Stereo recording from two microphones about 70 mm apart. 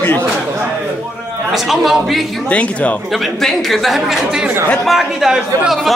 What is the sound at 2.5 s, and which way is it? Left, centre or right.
Speech, centre.